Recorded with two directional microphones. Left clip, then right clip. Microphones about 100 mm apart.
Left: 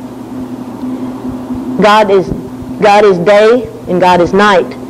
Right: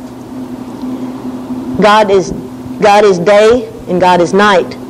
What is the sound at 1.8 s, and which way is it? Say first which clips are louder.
A man's voice: even; 45° right (ahead or behind).